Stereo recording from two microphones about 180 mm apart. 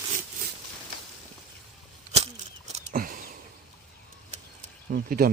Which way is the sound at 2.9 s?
50° right (ahead or behind).